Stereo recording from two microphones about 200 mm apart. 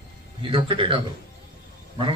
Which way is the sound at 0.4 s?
25° right (ahead or behind).